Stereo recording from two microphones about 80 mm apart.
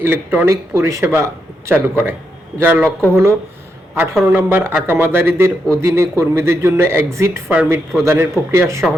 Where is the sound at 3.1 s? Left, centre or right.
Right.